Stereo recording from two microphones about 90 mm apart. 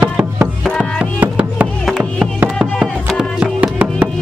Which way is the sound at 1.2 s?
15° right (ahead or behind).